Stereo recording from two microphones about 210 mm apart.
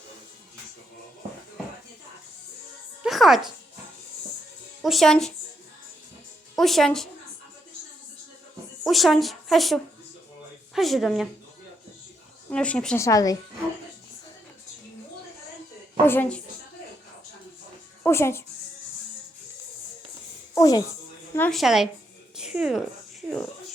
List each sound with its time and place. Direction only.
3.0 s music: centre (ahead or behind)
4.8 s speech: centre (ahead or behind)
6.6 s speech: centre (ahead or behind)
8.8 s speech: centre (ahead or behind)
12.5 s speech: 5° left (ahead or behind)
13.1 s a woman's voice: 15° left (ahead or behind)
16.0 s a woman's voice: 10° left (ahead or behind)
18.0 s speech: 10° left (ahead or behind)
20.6 s speech: 15° left (ahead or behind)
21.3 s speech: 5° left (ahead or behind)